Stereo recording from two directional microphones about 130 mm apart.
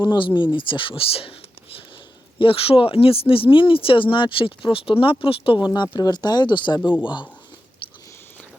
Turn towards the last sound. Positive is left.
turn(degrees=35)  # may be behind; listen again after turning